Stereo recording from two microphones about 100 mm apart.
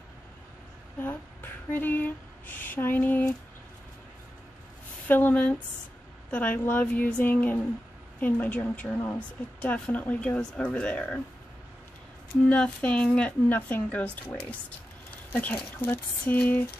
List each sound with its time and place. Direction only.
1.0 s speech: 20° left (ahead or behind)
5.0 s speech: 15° left (ahead or behind)
12.4 s speech: 10° left (ahead or behind)